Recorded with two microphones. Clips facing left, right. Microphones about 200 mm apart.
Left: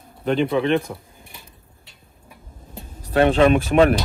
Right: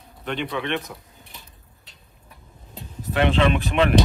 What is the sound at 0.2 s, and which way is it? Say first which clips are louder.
Speech: left 8 dB; 40° left (ahead or behind).